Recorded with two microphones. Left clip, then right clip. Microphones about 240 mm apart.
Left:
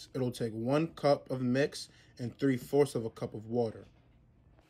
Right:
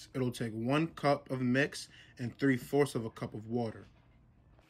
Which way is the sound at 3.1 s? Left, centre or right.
Centre.